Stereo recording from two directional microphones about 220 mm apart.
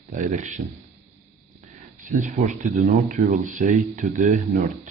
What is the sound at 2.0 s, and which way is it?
Speech, 35° right (ahead or behind).